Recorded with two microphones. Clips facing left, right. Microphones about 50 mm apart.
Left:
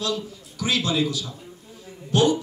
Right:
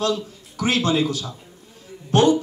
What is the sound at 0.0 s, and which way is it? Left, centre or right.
A man's voice, right.